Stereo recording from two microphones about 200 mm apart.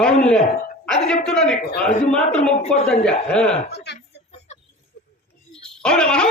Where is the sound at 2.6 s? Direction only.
30° left (ahead or behind).